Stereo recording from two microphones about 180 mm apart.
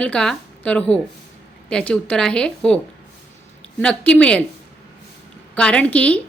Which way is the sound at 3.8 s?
5° left (ahead or behind).